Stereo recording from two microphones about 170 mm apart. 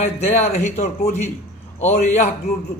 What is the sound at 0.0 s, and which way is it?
A man's voice, 40° left (ahead or behind).